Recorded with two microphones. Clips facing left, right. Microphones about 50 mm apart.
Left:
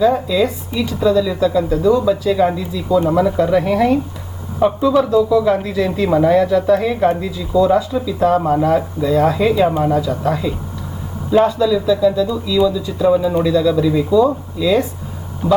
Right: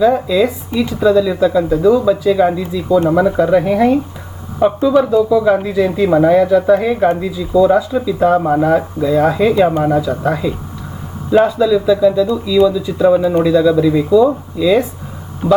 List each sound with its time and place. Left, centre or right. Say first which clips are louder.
0.0 s speech: right 2 dB; centre
1.9 s speech: right 2 dB; centre
7.9 s speech: right 2 dB; right
9.8 s speech: right 2 dB; right